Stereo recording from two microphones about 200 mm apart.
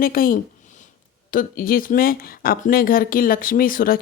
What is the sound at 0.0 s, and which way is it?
Speech, 45° left (ahead or behind).